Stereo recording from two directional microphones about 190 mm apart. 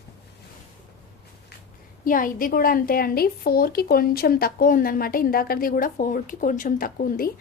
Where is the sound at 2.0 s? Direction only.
45° left (ahead or behind).